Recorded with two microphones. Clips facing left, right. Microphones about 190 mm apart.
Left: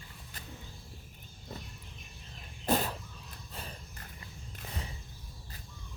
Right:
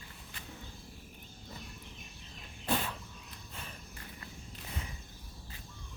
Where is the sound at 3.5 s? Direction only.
35° left (ahead or behind).